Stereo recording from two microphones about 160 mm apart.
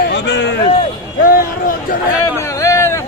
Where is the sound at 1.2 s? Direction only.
60° left (ahead or behind).